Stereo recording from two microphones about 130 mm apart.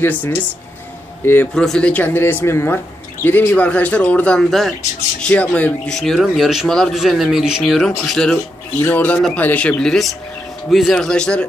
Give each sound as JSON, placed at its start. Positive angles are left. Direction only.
{"t": 0.0, "sound": "speech", "side_deg": 15}
{"t": 1.5, "sound": "speech", "side_deg": 5}
{"t": 5.2, "sound": "speech", "side_deg": 10}